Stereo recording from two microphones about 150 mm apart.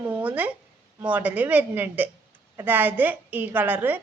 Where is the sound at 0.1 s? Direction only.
10° right (ahead or behind).